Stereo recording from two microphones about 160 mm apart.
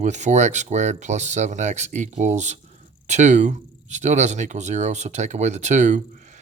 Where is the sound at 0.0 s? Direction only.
45° right (ahead or behind).